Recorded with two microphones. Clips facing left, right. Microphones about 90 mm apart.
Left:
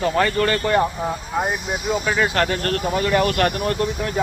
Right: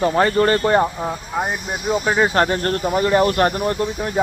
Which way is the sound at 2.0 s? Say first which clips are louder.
Right 5 dB; 30° right (ahead or behind).